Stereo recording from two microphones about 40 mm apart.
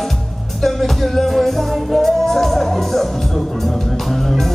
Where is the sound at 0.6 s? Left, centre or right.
Centre.